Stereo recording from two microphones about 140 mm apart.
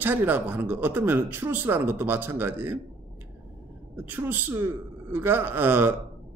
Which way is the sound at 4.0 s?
15° right (ahead or behind).